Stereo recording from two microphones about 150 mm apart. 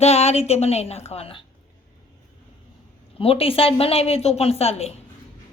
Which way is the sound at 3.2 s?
40° left (ahead or behind).